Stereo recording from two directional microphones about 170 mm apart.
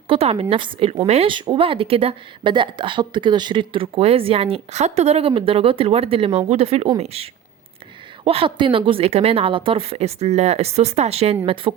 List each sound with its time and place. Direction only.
0.1 s speech: 35° right (ahead or behind)